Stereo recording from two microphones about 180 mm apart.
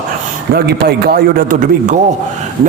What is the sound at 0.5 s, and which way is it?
A man's voice, 60° right (ahead or behind).